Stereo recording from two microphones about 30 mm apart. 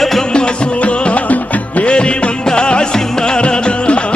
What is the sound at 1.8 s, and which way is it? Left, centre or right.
Music, left.